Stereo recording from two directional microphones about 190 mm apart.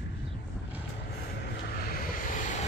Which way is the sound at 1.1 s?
60° left (ahead or behind).